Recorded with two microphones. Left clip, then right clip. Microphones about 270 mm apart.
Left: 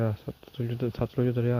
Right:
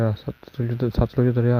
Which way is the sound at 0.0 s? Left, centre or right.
Right.